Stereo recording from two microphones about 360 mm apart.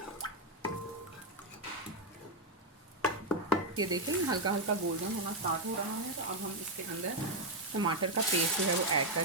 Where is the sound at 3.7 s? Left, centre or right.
Centre.